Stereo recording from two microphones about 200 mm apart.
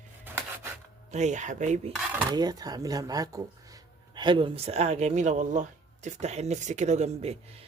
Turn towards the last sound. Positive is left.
turn(degrees=-30)  # may be behind; listen again after turning